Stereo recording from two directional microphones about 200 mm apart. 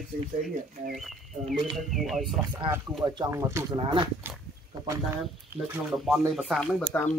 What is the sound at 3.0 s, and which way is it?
Speech, 20° right (ahead or behind).